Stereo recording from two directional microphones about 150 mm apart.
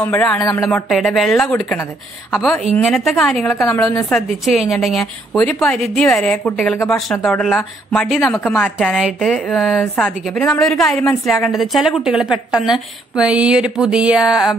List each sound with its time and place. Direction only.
0.4 s speech: 25° left (ahead or behind)
0.7 s a woman's voice: centre (ahead or behind)
8.3 s speech: 10° left (ahead or behind)
8.7 s a woman's voice: 5° right (ahead or behind)